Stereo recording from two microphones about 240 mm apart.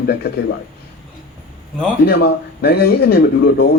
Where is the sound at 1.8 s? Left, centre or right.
Left.